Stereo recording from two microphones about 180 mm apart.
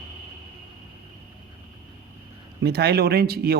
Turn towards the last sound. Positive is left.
turn(degrees=-60)  # may be behind; listen again after turning